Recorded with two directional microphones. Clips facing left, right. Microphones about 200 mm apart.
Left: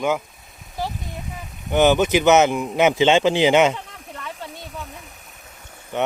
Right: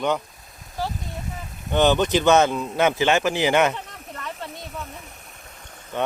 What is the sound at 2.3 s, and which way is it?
A man's voice, 15° left (ahead or behind).